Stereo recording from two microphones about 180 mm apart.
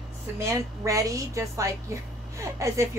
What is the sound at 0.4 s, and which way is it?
A woman's voice, 15° right (ahead or behind).